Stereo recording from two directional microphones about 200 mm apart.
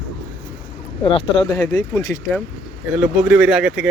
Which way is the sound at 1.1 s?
25° left (ahead or behind).